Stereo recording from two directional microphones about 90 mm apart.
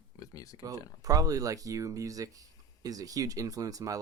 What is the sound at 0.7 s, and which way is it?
Speech, 40° right (ahead or behind).